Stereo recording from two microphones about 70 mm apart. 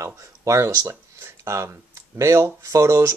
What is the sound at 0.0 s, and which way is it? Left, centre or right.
Speech, right.